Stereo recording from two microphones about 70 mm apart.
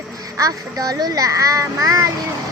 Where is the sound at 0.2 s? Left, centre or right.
Right.